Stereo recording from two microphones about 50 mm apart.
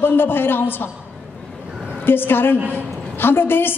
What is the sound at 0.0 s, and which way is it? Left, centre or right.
Speech, left.